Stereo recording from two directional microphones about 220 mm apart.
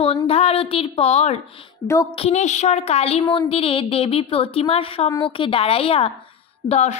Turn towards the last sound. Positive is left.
turn(degrees=30)  # may be behind; listen again after turning